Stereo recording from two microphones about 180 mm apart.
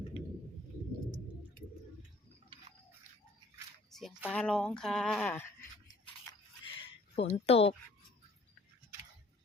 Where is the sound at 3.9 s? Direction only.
Centre (ahead or behind).